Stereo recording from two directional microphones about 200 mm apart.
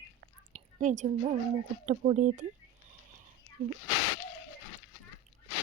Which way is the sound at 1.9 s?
35° right (ahead or behind).